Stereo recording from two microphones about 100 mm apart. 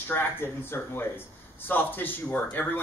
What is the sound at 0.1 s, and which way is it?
Speech, 20° left (ahead or behind).